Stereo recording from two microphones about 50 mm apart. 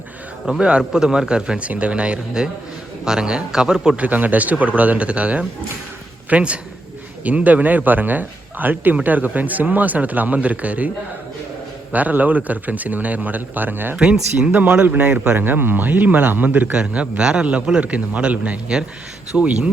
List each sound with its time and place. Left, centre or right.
0.6 s speech: centre
3.9 s a man's voice: right
13.9 s a man's voice: right
15.4 s speech: right
16.7 s a man's voice: right